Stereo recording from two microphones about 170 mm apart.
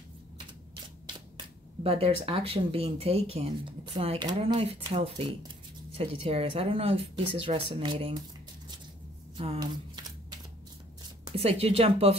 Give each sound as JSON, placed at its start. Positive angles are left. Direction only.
{"t": 1.8, "sound": "speech", "side_deg": -35}
{"t": 11.2, "sound": "speech", "side_deg": -35}